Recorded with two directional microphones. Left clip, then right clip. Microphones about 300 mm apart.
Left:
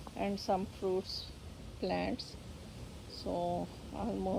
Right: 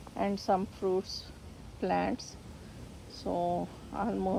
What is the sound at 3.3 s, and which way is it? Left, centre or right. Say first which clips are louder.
Speech: right 4 dB; right.